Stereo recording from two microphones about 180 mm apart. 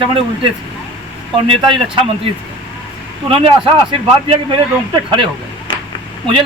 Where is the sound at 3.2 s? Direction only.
30° right (ahead or behind).